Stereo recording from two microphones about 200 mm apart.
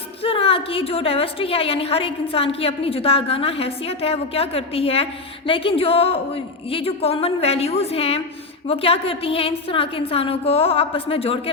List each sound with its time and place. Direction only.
0.2 s a woman's voice: 30° left (ahead or behind)